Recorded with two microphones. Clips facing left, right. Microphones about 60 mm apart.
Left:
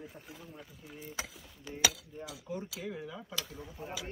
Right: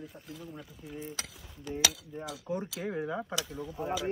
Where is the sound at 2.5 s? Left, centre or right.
Right.